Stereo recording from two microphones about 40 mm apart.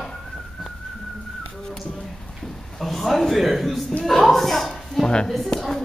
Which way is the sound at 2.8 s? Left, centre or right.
Centre.